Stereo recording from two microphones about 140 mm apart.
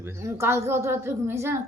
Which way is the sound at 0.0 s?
20° right (ahead or behind).